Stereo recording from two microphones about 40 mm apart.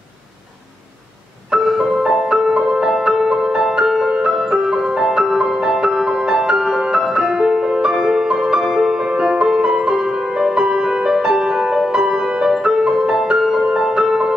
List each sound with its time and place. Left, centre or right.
1.6 s music: centre
9.3 s music: centre
12.4 s music: centre